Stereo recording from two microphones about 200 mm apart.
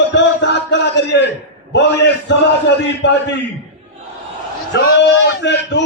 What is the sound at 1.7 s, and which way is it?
A man's voice, 60° left (ahead or behind).